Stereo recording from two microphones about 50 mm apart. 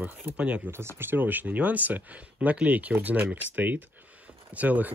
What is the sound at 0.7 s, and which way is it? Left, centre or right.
Speech, right.